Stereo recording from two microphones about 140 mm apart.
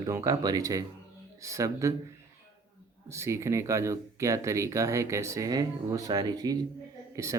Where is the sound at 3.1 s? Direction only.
20° right (ahead or behind).